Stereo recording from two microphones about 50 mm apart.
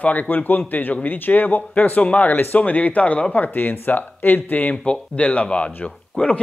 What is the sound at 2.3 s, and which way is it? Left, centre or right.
Speech, left.